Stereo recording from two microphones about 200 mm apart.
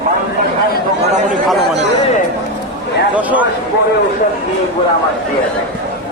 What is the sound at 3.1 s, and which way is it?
Speech, 10° right (ahead or behind).